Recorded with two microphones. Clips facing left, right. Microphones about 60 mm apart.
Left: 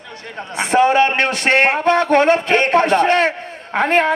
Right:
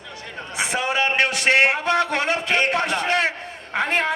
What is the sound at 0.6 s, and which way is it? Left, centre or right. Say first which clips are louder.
A man's voice: left 9 dB; left.